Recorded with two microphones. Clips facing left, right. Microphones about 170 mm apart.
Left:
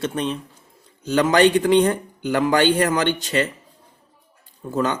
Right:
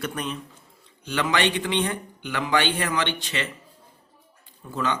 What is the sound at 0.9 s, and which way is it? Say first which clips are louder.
Speech: left 7 dB; 40° left (ahead or behind).